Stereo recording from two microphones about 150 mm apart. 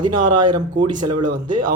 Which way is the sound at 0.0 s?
30° right (ahead or behind).